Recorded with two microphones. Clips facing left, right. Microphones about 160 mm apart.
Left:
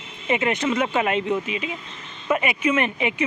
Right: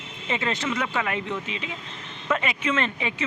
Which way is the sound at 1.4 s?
10° left (ahead or behind).